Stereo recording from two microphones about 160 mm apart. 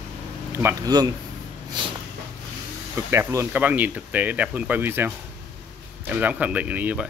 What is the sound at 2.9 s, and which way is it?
A man's voice, 15° right (ahead or behind).